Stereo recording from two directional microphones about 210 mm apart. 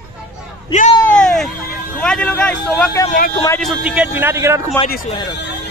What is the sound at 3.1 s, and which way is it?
Speech, 45° left (ahead or behind).